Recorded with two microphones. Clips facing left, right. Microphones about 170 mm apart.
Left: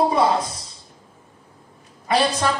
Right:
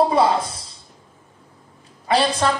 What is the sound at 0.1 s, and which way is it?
Speech, 30° right (ahead or behind).